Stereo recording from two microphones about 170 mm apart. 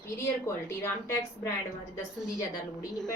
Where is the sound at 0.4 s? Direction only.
15° left (ahead or behind).